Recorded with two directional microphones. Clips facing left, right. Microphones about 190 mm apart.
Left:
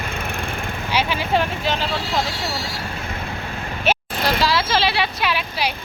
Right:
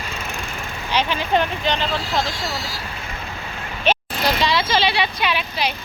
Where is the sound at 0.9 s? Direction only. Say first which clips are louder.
Right 1 dB; 10° left (ahead or behind).